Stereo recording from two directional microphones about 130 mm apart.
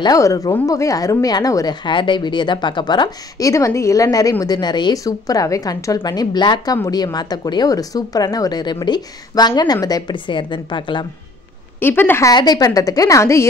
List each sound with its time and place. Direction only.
0.0 s a woman's voice: 25° left (ahead or behind)
11.8 s a woman's voice: 15° left (ahead or behind)
12.3 s a woman's voice: 30° left (ahead or behind)